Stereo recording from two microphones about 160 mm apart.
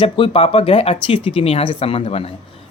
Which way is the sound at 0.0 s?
35° left (ahead or behind).